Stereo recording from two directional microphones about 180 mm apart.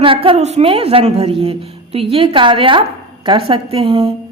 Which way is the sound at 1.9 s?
30° right (ahead or behind).